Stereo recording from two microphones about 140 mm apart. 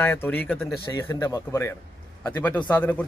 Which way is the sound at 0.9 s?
20° left (ahead or behind).